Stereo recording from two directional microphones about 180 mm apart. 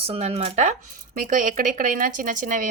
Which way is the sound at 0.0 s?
35° right (ahead or behind).